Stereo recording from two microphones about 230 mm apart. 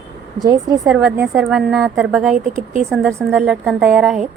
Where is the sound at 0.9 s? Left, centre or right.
Centre.